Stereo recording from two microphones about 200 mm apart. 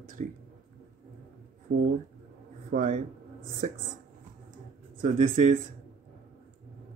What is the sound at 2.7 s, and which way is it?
A man's voice, 45° right (ahead or behind).